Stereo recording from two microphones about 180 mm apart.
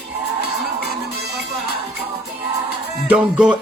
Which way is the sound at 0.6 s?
65° right (ahead or behind).